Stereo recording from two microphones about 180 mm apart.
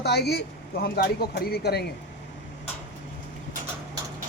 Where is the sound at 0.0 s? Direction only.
65° left (ahead or behind).